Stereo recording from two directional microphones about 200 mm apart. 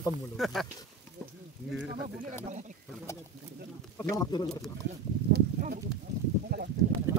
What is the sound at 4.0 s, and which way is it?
Speech, 15° left (ahead or behind).